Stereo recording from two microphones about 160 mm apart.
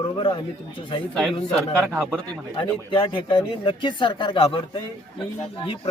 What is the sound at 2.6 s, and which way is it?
Speech, 30° left (ahead or behind).